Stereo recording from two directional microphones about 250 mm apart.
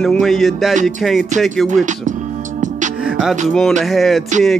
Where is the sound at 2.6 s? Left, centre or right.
Right.